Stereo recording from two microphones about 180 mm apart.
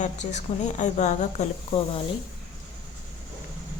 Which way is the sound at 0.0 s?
40° left (ahead or behind).